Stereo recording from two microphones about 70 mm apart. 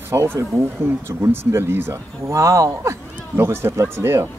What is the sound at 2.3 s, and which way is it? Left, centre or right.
Speech, right.